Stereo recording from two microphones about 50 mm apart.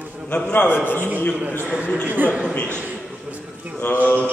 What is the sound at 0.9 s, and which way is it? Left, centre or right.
A man's voice, right.